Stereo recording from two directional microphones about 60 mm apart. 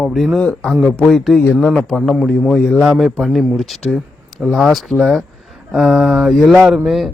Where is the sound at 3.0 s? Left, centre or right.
Centre.